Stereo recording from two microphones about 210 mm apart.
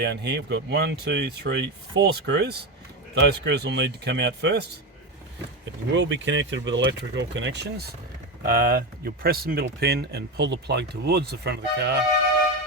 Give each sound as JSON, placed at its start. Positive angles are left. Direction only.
{"t": 0.0, "sound": "speech", "side_deg": -55}
{"t": 5.9, "sound": "speech", "side_deg": -60}
{"t": 8.4, "sound": "speech", "side_deg": -45}